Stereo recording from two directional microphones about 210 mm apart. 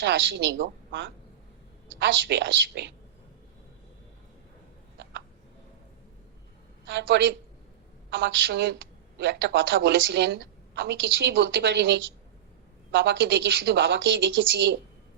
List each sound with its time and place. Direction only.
0.0 s a woman's voice: 55° right (ahead or behind)
6.8 s a woman's voice: 60° right (ahead or behind)